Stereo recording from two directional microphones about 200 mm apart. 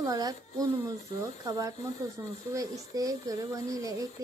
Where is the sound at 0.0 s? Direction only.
20° right (ahead or behind).